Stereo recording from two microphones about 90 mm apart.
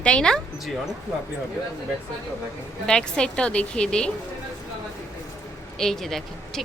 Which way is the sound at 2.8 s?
10° left (ahead or behind).